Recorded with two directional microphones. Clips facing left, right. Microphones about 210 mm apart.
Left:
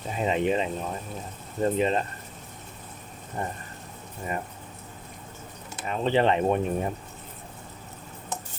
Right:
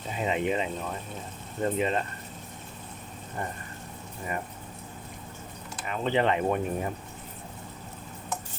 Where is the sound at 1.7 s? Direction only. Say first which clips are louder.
Left 3 dB; 30° left (ahead or behind).